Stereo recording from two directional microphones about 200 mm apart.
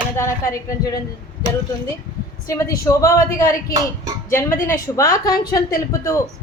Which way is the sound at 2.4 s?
15° left (ahead or behind).